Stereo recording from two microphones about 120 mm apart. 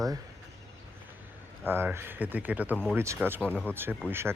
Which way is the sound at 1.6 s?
20° right (ahead or behind).